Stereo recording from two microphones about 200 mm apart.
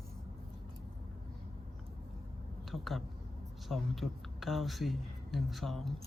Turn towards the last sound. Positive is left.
turn(degrees=0)  # may be behind; listen again after turning